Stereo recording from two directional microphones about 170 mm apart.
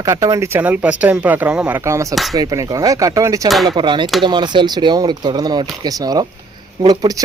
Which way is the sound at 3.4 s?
Centre (ahead or behind).